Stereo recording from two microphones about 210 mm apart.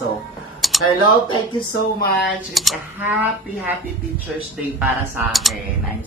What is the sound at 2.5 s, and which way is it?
Speech, 5° right (ahead or behind).